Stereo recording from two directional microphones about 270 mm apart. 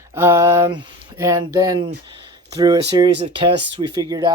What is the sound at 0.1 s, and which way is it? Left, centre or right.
Speech, centre.